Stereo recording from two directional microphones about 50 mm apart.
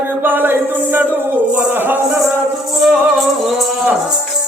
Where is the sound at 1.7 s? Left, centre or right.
Right.